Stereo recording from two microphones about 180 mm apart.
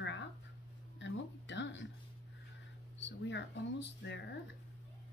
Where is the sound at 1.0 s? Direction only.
90° left.